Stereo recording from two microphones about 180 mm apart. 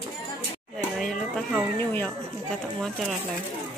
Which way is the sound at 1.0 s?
5° left (ahead or behind).